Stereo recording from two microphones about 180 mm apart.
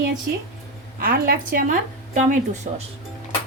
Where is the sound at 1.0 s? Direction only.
55° right (ahead or behind).